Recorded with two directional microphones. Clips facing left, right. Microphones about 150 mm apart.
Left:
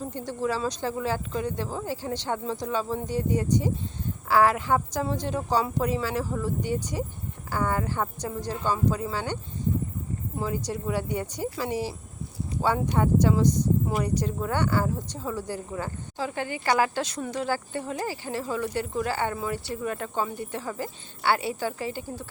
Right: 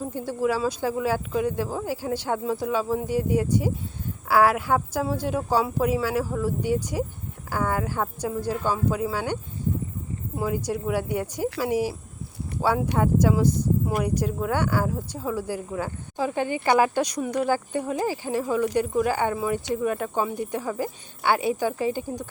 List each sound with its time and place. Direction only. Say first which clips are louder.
0.0 s speech: right 4 dB; 10° right (ahead or behind)